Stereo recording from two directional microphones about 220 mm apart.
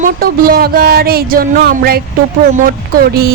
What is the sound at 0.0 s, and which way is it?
A woman's voice, 40° right (ahead or behind).